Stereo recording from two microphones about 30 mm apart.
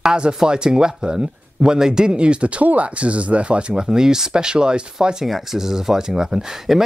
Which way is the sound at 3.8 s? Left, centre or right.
Centre.